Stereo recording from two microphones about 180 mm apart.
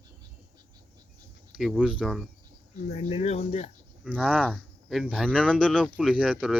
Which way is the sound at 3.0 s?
35° left (ahead or behind).